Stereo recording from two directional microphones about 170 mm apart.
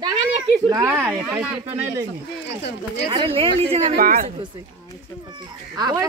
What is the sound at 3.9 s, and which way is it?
Speech, 55° right (ahead or behind).